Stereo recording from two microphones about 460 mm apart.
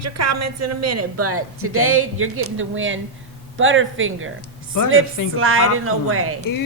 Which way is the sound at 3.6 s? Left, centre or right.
Right.